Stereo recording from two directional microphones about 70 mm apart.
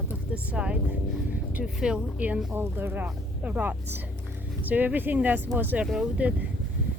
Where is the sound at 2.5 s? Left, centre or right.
Right.